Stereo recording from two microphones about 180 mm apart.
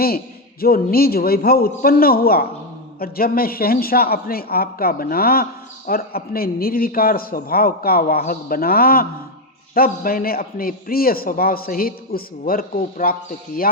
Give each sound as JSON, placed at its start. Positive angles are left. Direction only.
{"t": 0.6, "sound": "speech", "side_deg": 55}